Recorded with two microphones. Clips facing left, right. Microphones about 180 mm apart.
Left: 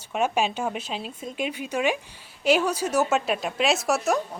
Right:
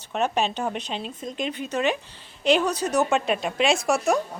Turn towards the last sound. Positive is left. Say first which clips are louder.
# right 2 dB
turn(degrees=0)  # may be behind; listen again after turning